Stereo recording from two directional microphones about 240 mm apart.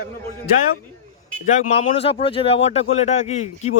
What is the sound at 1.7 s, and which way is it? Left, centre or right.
Speech, left.